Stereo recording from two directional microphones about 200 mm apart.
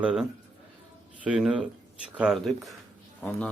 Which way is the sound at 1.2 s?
5° right (ahead or behind).